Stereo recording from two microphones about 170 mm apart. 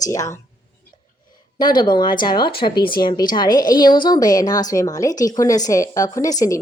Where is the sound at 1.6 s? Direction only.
25° left (ahead or behind).